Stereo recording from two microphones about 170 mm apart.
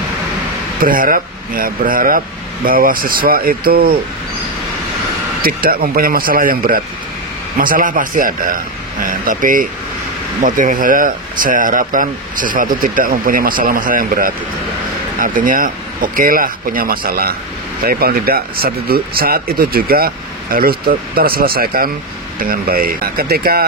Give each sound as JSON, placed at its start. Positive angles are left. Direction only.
{"t": 0.7, "sound": "speech", "side_deg": -55}
{"t": 5.4, "sound": "speech", "side_deg": -60}